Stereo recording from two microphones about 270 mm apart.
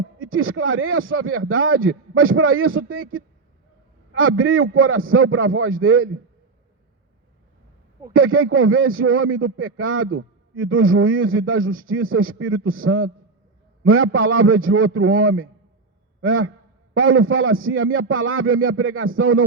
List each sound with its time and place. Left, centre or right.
0.2 s a man's voice: right
8.1 s a man's voice: right